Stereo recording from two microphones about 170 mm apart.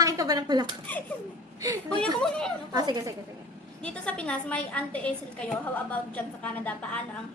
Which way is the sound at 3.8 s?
5° left (ahead or behind).